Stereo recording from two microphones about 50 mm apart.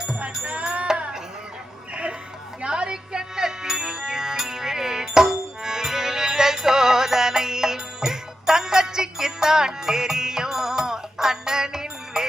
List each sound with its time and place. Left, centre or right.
0.4 s music: right
2.6 s music: centre